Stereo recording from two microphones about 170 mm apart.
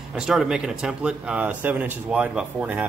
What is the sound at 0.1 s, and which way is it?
Speech, centre (ahead or behind).